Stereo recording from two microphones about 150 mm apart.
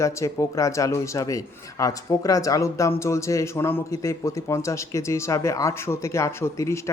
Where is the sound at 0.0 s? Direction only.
20° left (ahead or behind).